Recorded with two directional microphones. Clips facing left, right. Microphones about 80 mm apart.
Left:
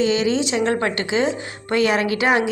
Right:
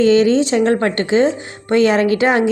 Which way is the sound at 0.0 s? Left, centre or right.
Right.